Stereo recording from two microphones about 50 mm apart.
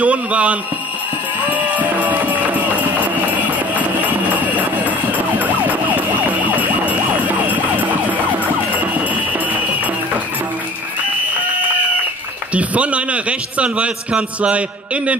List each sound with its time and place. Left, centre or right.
0.0 s a man's voice: right
1.5 s music: right
12.5 s a man's voice: right